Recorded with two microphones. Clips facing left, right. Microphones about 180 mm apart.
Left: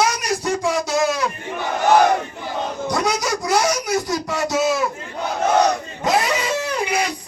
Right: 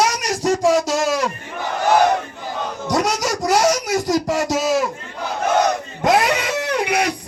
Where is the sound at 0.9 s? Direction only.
90° right.